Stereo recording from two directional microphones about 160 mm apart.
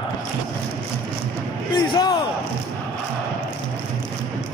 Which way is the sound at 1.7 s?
30° left (ahead or behind).